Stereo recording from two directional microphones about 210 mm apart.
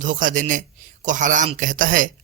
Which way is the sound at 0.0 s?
40° right (ahead or behind).